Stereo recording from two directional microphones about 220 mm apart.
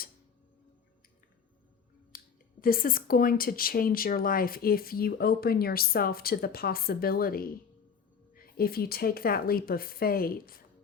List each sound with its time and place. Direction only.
2.6 s speech: 40° left (ahead or behind)